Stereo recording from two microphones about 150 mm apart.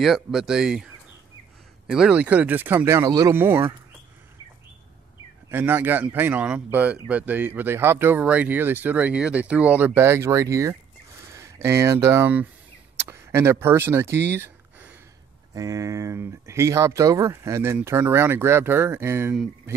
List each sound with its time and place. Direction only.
0.0 s speech: centre (ahead or behind)
1.9 s speech: 5° right (ahead or behind)
5.5 s speech: 15° right (ahead or behind)